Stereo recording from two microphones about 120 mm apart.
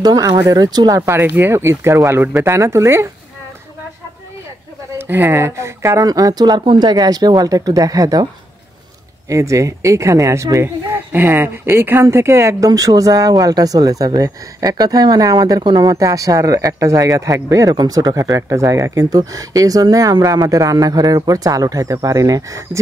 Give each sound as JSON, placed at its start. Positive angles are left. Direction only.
{"t": 0.0, "sound": "speech", "side_deg": -35}
{"t": 1.0, "sound": "speech", "side_deg": -20}
{"t": 4.9, "sound": "speech", "side_deg": -20}
{"t": 9.3, "sound": "speech", "side_deg": -25}
{"t": 15.9, "sound": "speech", "side_deg": -30}